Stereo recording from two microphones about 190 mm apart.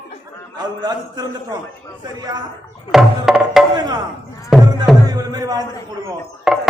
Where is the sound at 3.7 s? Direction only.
20° right (ahead or behind).